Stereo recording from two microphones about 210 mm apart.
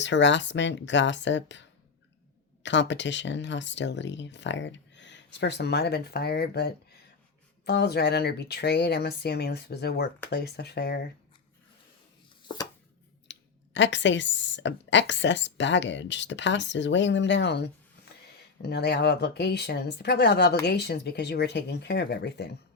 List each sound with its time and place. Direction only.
0.0 s speech: 60° left (ahead or behind)
2.6 s speech: 60° left (ahead or behind)
13.3 s clicking: 60° left (ahead or behind)
13.7 s speech: 60° left (ahead or behind)